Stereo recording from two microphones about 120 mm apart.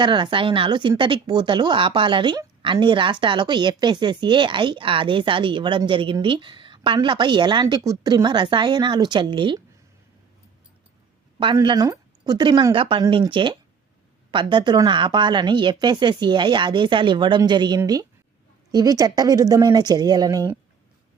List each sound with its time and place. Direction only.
0.0 s a woman's voice: 40° right (ahead or behind)
11.6 s a woman's voice: 35° right (ahead or behind)